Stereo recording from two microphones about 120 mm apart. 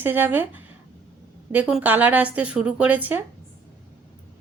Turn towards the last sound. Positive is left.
turn(degrees=-15)  # may be behind; listen again after turning